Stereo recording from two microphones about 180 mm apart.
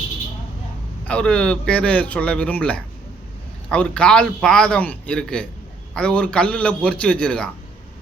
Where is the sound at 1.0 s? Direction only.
5° left (ahead or behind).